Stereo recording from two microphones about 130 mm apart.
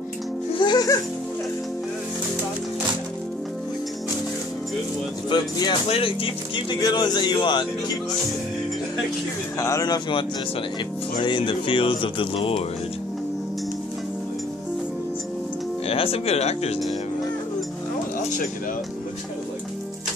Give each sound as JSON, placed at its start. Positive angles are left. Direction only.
{"t": 0.6, "sound": "music", "side_deg": 35}
{"t": 5.3, "sound": "speech", "side_deg": 35}
{"t": 5.9, "sound": "speech", "side_deg": 45}
{"t": 9.6, "sound": "speech", "side_deg": 25}
{"t": 15.9, "sound": "speech", "side_deg": 50}